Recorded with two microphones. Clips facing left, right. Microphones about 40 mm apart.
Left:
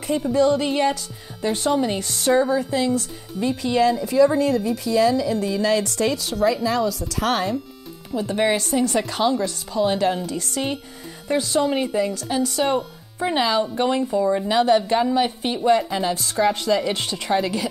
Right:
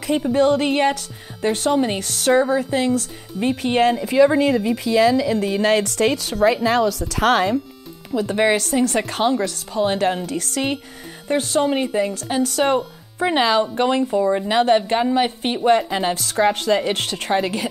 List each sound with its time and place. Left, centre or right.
0.3 s a woman's voice: right
4.1 s a woman's voice: right
9.7 s speech: right
10.2 s a woman's voice: right
14.2 s a woman's voice: right
14.5 s a woman's voice: right